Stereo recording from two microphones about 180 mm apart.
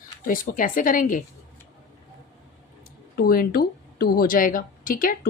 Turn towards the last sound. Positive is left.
turn(degrees=50)  # may be behind; listen again after turning